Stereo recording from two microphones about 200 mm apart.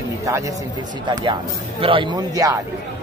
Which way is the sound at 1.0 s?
25° right (ahead or behind).